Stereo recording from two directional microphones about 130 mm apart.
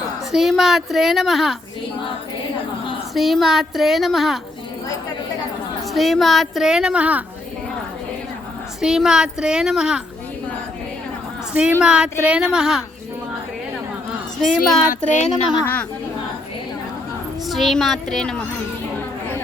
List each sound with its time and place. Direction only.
0.3 s a woman's voice: 5° right (ahead or behind)
3.2 s a woman's voice: centre (ahead or behind)
5.9 s a woman's voice: centre (ahead or behind)
8.8 s a woman's voice: 5° right (ahead or behind)
11.8 s a woman's voice: 5° right (ahead or behind)
14.4 s a woman's voice: centre (ahead or behind)
15.1 s speech: 60° left (ahead or behind)
15.6 s speech: 10° left (ahead or behind)
17.5 s a woman's voice: centre (ahead or behind)